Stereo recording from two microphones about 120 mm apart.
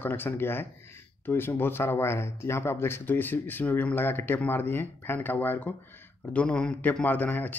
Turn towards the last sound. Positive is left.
turn(degrees=15)  # may be behind; listen again after turning